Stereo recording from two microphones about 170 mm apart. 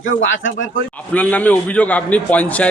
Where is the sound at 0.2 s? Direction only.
90° left.